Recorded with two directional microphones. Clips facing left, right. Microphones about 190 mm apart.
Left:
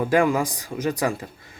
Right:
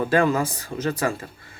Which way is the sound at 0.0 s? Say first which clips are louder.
Even; 15° left (ahead or behind).